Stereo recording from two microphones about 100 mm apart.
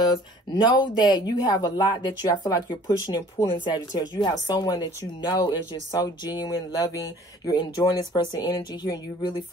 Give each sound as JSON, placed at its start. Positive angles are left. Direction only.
{"t": 0.0, "sound": "speech", "side_deg": 50}
{"t": 5.9, "sound": "a sound", "side_deg": 40}
{"t": 7.5, "sound": "speech", "side_deg": 50}